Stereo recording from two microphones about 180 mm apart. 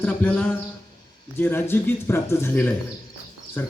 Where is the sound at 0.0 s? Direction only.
10° left (ahead or behind).